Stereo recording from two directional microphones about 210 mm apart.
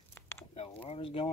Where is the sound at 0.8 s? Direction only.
25° left (ahead or behind).